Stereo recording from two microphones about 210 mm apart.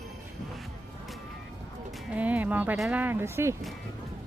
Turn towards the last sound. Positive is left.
turn(degrees=-10)  # may be behind; listen again after turning